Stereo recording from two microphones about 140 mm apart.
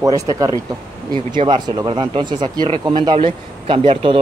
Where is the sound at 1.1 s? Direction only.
40° right (ahead or behind).